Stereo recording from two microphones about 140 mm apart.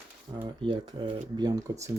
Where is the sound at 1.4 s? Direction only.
25° right (ahead or behind).